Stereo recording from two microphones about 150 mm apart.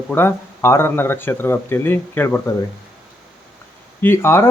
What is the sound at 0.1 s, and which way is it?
Speech, 15° left (ahead or behind).